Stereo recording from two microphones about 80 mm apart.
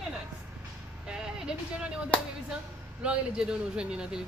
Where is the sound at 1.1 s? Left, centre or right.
Centre.